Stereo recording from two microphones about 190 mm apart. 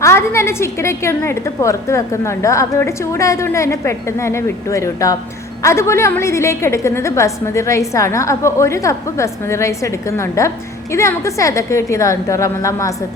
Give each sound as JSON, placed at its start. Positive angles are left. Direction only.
{"t": 0.0, "sound": "a woman's voice", "side_deg": 15}